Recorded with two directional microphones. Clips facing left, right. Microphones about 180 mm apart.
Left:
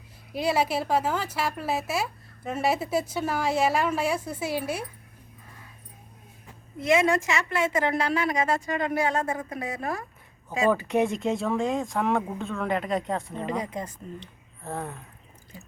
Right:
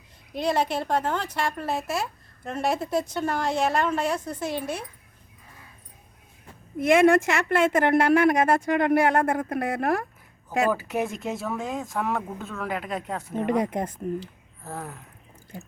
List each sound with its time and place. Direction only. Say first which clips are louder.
0.3 s speech: even; 5° left (ahead or behind)
6.7 s a woman's voice: right 5 dB; 55° right (ahead or behind)
10.7 s speech: left 3 dB; 5° right (ahead or behind)
13.4 s a woman's voice: right 6 dB; 60° right (ahead or behind)
14.2 s a sound: right 6 dB; 5° right (ahead or behind)